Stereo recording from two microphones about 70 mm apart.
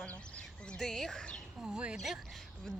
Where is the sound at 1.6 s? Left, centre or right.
Centre.